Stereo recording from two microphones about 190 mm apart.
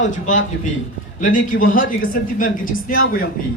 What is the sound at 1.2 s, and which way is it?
Speech, 45° left (ahead or behind).